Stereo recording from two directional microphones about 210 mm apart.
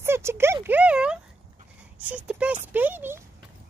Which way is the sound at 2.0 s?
5° right (ahead or behind).